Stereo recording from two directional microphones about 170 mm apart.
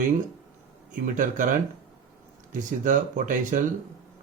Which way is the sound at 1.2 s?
50° right (ahead or behind).